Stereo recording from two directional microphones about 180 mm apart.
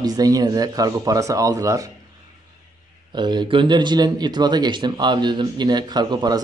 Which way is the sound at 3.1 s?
25° right (ahead or behind).